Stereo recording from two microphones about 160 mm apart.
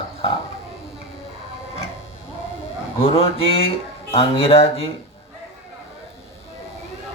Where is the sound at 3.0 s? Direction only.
35° left (ahead or behind).